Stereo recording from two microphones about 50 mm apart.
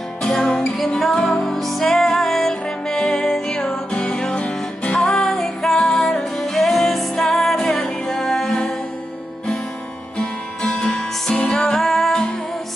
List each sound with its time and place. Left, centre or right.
0.2 s music: centre
5.2 s music: centre
10.1 s music: centre